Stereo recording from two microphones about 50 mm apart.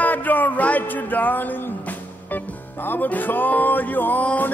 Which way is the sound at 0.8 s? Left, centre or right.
Left.